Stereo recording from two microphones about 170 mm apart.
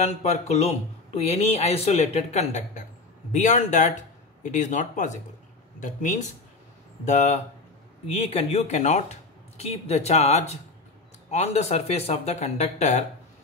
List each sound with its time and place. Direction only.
0.0 s speech: 40° left (ahead or behind)